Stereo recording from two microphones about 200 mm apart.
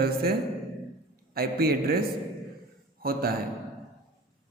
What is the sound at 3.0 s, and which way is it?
Speech, 50° right (ahead or behind).